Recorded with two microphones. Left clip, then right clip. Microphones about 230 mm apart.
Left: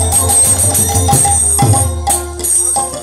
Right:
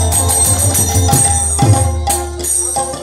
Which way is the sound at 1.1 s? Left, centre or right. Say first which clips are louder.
Left 4 dB; left.